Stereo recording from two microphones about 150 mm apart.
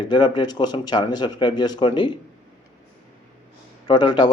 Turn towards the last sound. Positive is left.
turn(degrees=30)  # may be behind; listen again after turning